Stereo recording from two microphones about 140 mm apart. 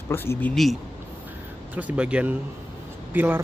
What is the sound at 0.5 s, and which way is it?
Speech, centre (ahead or behind).